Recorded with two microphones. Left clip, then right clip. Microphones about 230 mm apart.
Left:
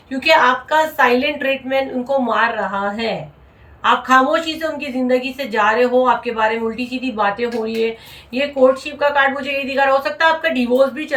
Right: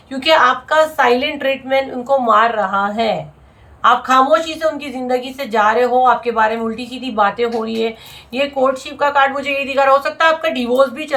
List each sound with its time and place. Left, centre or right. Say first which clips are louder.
0.1 s a woman's voice: right 1 dB; centre